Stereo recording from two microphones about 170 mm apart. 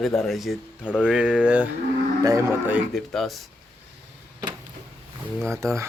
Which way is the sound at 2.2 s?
20° right (ahead or behind).